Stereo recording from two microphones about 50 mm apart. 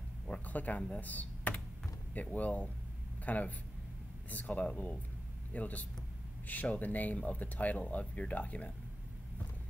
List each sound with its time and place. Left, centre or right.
0.5 s speech: left
0.9 s computer keyboard: left
2.1 s speech: left